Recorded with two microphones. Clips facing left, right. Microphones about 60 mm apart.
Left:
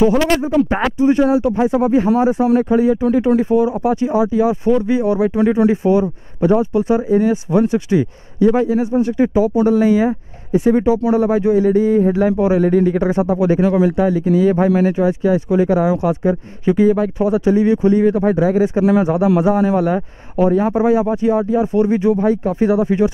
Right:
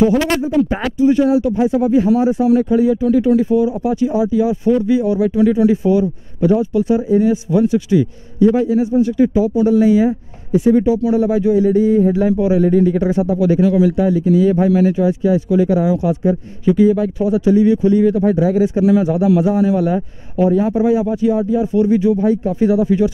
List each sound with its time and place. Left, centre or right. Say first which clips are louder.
0.0 s speech: even; left